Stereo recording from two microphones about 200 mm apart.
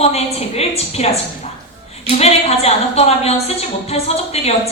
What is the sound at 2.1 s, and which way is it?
A woman's voice, 30° left (ahead or behind).